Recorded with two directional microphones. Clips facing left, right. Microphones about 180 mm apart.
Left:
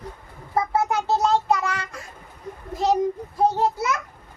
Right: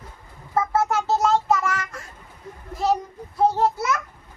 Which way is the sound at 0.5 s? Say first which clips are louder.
Right 1 dB; 15° left (ahead or behind).